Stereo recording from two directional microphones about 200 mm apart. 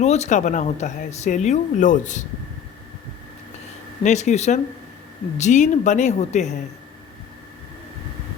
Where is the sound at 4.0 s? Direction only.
35° left (ahead or behind).